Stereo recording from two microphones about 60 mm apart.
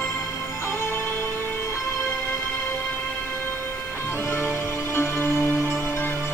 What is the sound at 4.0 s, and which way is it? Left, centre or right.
Music, left.